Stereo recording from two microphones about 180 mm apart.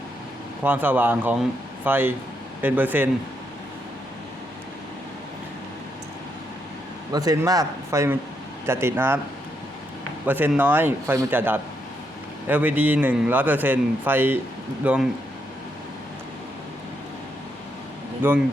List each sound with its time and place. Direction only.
0.6 s a man's voice: 10° right (ahead or behind)
7.1 s a man's voice: 20° right (ahead or behind)
10.2 s a man's voice: 10° right (ahead or behind)
18.2 s a man's voice: 10° right (ahead or behind)